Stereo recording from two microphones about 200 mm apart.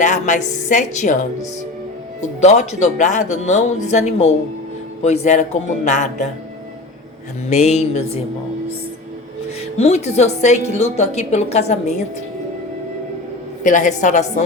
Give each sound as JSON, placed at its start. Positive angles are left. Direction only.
{"t": 0.0, "sound": "speech", "side_deg": 35}
{"t": 2.4, "sound": "speech", "side_deg": 35}
{"t": 7.5, "sound": "speech", "side_deg": 35}
{"t": 9.7, "sound": "speech", "side_deg": 35}
{"t": 13.7, "sound": "speech", "side_deg": 40}